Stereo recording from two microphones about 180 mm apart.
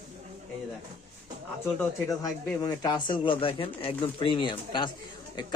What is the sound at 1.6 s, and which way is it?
Speech, 15° left (ahead or behind).